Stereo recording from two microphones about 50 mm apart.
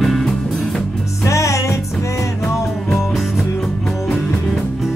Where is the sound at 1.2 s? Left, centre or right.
Left.